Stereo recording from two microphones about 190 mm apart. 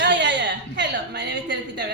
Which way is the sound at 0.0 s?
70° right (ahead or behind).